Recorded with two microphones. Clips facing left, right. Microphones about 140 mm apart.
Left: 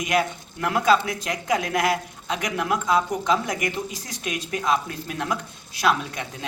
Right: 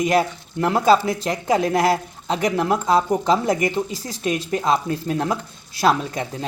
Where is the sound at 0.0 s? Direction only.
30° right (ahead or behind).